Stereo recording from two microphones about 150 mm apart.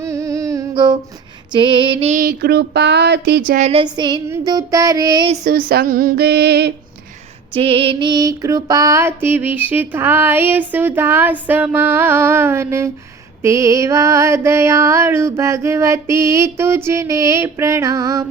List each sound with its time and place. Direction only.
0.0 s a sound: 20° right (ahead or behind)
1.5 s female singing: 30° right (ahead or behind)
2.0 s child singing: 75° right (ahead or behind)
3.6 s female singing: 40° right (ahead or behind)
3.8 s mantra: 30° right (ahead or behind)
5.5 s child singing: 85° right
7.5 s female singing: 35° right (ahead or behind); by 12.9 s 15° right (ahead or behind)
13.4 s mantra: 20° right (ahead or behind)